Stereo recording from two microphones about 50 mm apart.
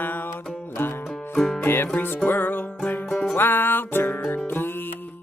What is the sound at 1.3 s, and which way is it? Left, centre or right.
Music, centre.